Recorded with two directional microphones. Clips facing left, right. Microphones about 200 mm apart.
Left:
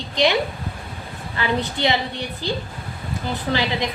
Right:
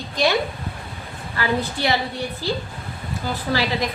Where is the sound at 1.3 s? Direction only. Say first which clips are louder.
Even; 20° left (ahead or behind).